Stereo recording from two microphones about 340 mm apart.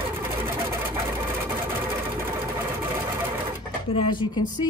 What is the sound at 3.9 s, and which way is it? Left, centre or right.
Speech, centre.